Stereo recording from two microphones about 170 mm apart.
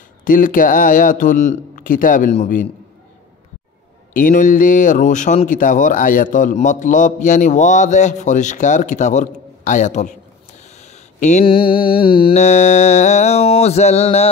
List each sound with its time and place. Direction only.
0.2 s speech: 50° left (ahead or behind)
4.1 s speech: 50° left (ahead or behind)
10.8 s a sound: 40° left (ahead or behind)
11.4 s mantra: 30° left (ahead or behind)
12.4 s mantra: 45° left (ahead or behind)